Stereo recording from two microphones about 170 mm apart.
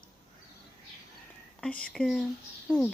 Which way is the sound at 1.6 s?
5° left (ahead or behind).